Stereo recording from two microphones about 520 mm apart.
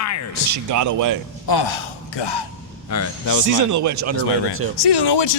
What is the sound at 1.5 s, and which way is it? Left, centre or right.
Speech, left.